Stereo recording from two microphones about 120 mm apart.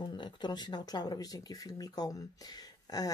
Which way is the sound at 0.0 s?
40° left (ahead or behind).